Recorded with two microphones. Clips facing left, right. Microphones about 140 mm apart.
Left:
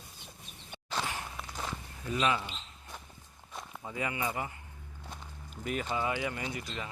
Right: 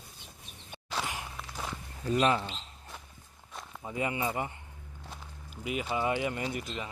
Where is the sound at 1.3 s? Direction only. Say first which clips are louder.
Even; centre (ahead or behind).